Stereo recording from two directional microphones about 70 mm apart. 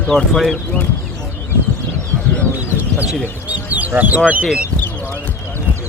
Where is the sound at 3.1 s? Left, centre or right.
Right.